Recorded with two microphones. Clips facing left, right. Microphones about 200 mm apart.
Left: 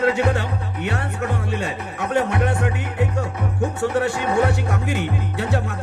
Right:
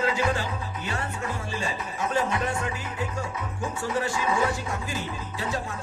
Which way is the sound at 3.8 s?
65° left (ahead or behind).